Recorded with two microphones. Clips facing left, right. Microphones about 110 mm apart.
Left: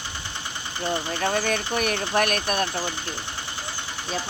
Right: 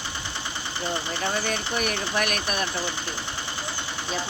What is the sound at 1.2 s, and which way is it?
Speech, 50° left (ahead or behind).